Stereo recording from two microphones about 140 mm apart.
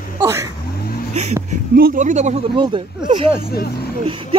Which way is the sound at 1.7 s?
80° right.